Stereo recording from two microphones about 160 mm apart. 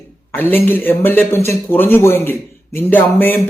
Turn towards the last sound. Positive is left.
turn(degrees=10)  # may be behind; listen again after turning